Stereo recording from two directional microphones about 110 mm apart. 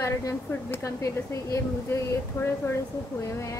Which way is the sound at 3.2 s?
30° left (ahead or behind).